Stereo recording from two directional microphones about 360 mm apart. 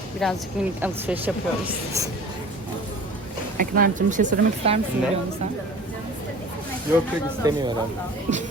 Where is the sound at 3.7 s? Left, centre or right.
Right.